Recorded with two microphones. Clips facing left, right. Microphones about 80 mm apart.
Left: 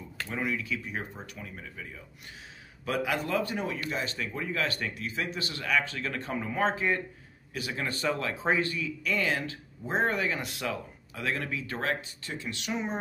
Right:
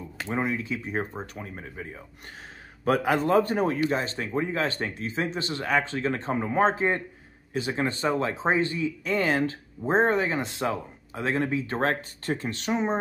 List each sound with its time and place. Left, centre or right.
0.3 s speech: right